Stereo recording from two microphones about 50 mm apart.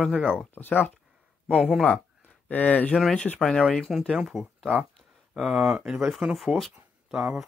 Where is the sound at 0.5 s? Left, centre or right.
Left.